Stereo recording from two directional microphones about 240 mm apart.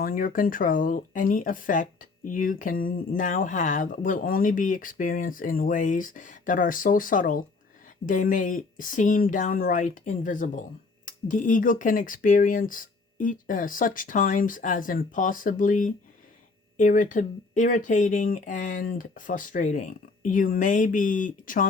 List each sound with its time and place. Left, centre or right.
0.0 s speech: left